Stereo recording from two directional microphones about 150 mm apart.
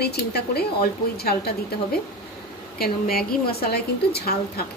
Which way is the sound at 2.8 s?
90° left.